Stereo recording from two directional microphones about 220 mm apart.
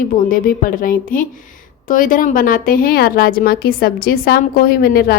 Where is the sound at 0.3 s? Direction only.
40° left (ahead or behind).